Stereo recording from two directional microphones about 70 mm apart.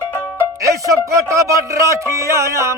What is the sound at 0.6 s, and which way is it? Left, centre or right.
Music, right.